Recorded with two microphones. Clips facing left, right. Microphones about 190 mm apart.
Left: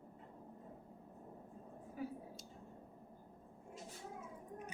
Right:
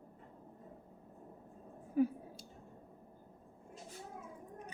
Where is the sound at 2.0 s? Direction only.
60° right (ahead or behind).